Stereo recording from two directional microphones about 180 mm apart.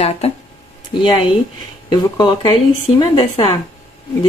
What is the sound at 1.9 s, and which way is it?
Speech, 20° left (ahead or behind).